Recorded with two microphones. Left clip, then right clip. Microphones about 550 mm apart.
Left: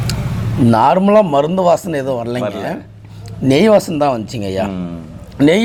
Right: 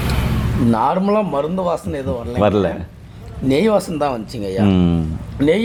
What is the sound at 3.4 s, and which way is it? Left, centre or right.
Speech, left.